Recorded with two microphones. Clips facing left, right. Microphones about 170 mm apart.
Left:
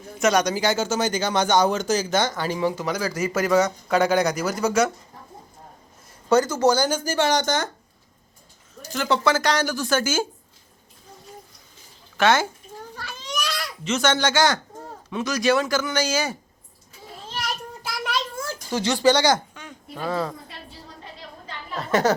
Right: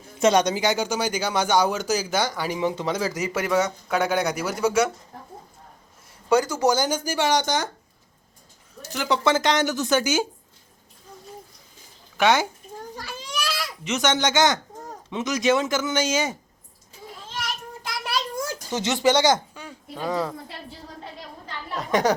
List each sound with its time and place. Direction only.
0.2 s speech: 25° right (ahead or behind)
3.4 s speech: 5° right (ahead or behind)
6.2 s speech: 10° right (ahead or behind)
8.9 s a woman's voice: 15° right (ahead or behind)
12.1 s speech: 15° right (ahead or behind)
12.9 s a sound: 10° right (ahead or behind)
13.8 s a woman's voice: 15° right (ahead or behind)
18.3 s speech: 20° right (ahead or behind)
21.8 s speech: 15° right (ahead or behind)